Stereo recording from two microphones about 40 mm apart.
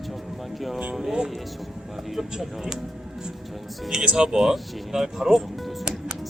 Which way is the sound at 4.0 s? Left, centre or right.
Right.